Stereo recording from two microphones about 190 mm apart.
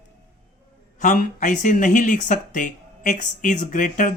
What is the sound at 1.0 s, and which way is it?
Speech, 45° left (ahead or behind).